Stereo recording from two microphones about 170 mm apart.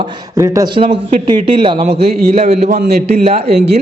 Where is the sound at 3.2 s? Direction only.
40° right (ahead or behind).